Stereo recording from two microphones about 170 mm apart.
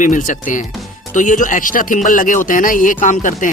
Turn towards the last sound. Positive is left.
turn(degrees=50)  # may be behind; listen again after turning